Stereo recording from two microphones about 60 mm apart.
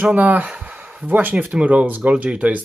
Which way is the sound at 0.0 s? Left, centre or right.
Right.